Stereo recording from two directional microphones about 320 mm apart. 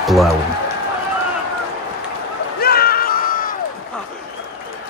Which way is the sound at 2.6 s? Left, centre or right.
Left.